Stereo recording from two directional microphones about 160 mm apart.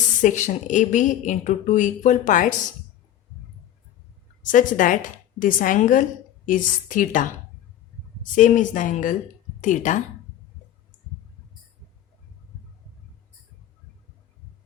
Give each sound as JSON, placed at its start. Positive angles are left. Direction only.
{"t": 0.2, "sound": "a woman's voice", "side_deg": 50}
{"t": 4.4, "sound": "a woman's voice", "side_deg": 55}